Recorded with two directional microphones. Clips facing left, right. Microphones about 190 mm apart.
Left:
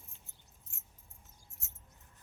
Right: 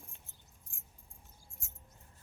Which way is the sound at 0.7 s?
20° left (ahead or behind).